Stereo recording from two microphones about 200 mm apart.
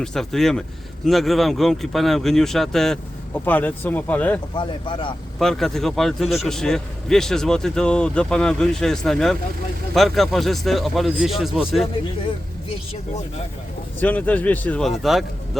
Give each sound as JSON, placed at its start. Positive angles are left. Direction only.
{"t": 0.0, "sound": "a man's voice", "side_deg": 0}
{"t": 4.5, "sound": "speech", "side_deg": 25}
{"t": 5.4, "sound": "a man's voice", "side_deg": 0}
{"t": 14.0, "sound": "speech", "side_deg": 10}